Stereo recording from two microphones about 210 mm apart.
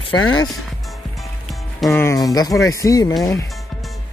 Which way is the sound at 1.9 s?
10° left (ahead or behind).